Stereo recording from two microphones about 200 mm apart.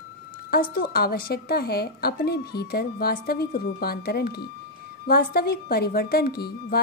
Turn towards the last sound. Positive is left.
turn(degrees=50)  # may be behind; listen again after turning